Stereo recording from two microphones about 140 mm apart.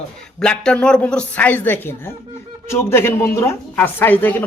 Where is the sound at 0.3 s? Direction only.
5° left (ahead or behind).